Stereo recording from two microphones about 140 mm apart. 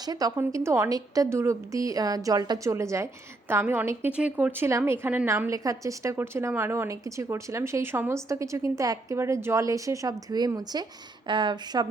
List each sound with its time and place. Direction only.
0.0 s a woman's voice: 25° right (ahead or behind)